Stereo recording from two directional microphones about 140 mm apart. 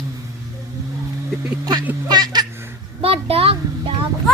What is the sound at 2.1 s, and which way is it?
Speech, 30° right (ahead or behind).